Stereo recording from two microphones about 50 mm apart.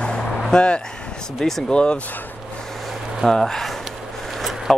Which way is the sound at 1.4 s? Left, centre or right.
Centre.